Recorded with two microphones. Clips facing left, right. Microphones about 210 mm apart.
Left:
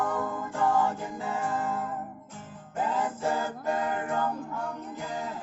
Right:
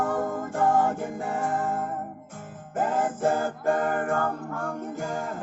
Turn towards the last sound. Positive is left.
turn(degrees=-50)  # may be behind; listen again after turning